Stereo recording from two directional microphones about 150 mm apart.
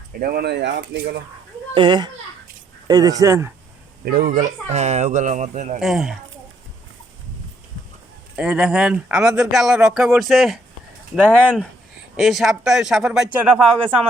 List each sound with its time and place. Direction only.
0.1 s speech: 80° right
1.7 s a child's voice: 30° right (ahead or behind)
4.0 s speech: 70° right (ahead or behind); by 5.8 s 55° right (ahead or behind)
5.8 s speech: centre (ahead or behind)
8.4 s speech: 5° right (ahead or behind)